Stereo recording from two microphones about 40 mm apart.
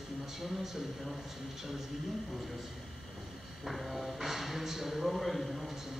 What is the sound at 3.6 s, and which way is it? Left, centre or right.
A man's voice, centre.